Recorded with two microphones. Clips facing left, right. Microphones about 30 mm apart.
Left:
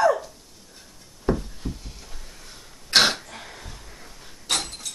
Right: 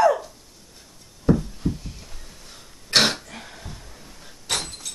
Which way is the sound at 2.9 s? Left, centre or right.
Centre.